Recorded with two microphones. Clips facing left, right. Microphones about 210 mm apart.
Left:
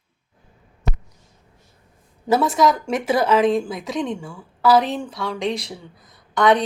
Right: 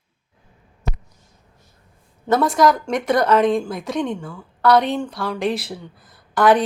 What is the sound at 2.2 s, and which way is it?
A woman's voice, 5° left (ahead or behind).